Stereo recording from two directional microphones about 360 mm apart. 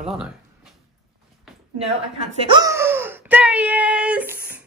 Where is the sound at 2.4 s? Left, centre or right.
Centre.